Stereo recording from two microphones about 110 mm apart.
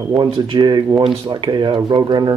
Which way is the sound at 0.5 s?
40° right (ahead or behind).